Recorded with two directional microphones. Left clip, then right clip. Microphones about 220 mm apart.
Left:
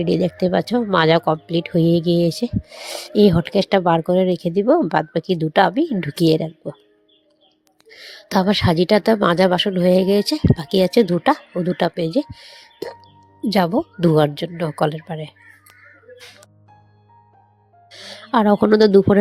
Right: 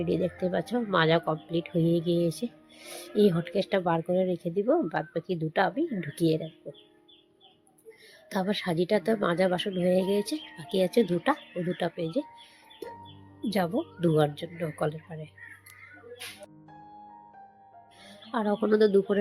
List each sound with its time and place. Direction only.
0.0 s speech: 45° left (ahead or behind)
7.9 s speech: 45° left (ahead or behind)
13.5 s speech: 40° left (ahead or behind)
18.0 s speech: 45° left (ahead or behind)